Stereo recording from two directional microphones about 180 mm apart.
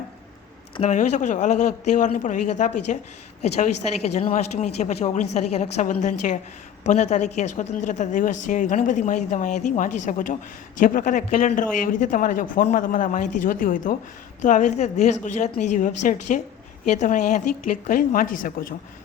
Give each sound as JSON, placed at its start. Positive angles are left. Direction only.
{"t": 0.8, "sound": "a woman's voice", "side_deg": 40}